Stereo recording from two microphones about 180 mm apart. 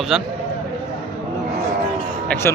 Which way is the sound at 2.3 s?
15° left (ahead or behind).